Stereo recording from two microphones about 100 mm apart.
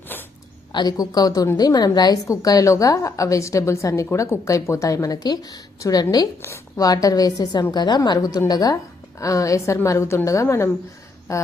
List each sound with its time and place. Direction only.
0.1 s zipper: 20° left (ahead or behind)
0.7 s a woman's voice: 45° left (ahead or behind)